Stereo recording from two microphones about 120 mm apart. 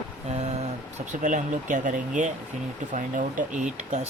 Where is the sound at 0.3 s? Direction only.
65° right (ahead or behind).